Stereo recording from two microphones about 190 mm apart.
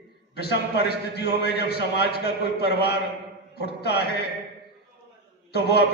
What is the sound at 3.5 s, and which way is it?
Speech, 60° left (ahead or behind).